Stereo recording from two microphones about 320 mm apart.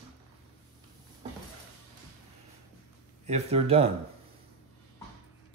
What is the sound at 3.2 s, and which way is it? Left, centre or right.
Speech, centre.